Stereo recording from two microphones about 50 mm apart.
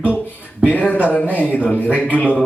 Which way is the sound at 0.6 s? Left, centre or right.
Left.